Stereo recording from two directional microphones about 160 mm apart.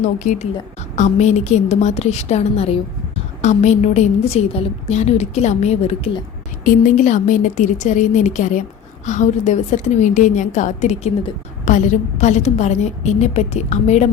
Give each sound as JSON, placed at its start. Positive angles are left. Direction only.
{"t": 0.0, "sound": "a woman's voice", "side_deg": 50}
{"t": 6.7, "sound": "a woman's voice", "side_deg": 50}